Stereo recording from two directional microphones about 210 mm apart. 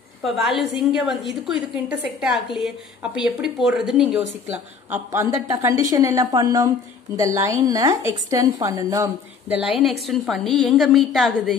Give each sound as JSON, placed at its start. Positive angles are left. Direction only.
{"t": 0.2, "sound": "a woman's voice", "side_deg": 0}
{"t": 4.9, "sound": "a woman's voice", "side_deg": -10}
{"t": 9.6, "sound": "a woman's voice", "side_deg": 0}